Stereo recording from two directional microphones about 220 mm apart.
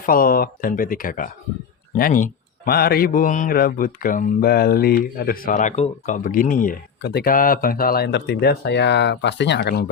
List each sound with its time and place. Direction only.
0.0 s a man's voice: 40° left (ahead or behind)